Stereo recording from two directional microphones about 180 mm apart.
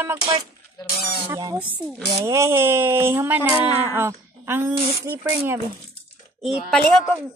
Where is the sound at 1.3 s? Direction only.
20° right (ahead or behind).